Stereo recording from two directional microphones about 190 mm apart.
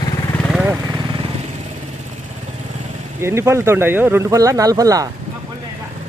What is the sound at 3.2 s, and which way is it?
Speech, 15° right (ahead or behind).